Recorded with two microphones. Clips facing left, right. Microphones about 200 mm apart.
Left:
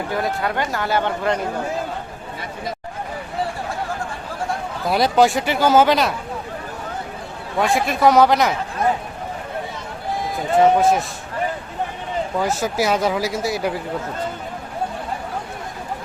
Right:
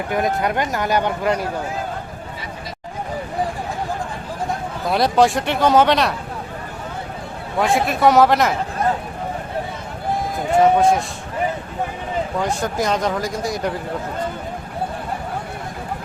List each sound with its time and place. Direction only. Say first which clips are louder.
0.1 s speech: right 4 dB; 20° right (ahead or behind)
4.9 s speech: even; centre (ahead or behind)
7.6 s speech: even; centre (ahead or behind)
10.5 s speech: even; centre (ahead or behind)
12.4 s speech: left 2 dB; 5° left (ahead or behind)